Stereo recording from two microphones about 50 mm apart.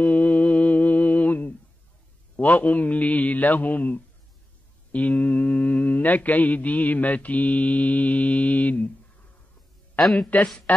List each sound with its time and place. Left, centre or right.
0.0 s humming: left
2.3 s mantra: left
10.3 s mantra: left